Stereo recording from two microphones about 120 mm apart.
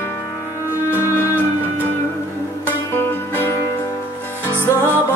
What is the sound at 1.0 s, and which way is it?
Music, 20° left (ahead or behind).